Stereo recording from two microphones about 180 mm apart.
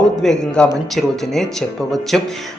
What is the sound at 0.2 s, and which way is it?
A man's voice, 5° left (ahead or behind).